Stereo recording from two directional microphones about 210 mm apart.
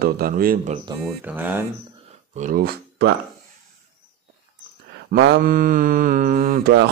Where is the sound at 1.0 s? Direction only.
10° right (ahead or behind).